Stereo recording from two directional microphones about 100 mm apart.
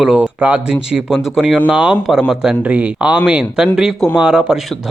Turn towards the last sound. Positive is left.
turn(degrees=-5)  # may be behind; listen again after turning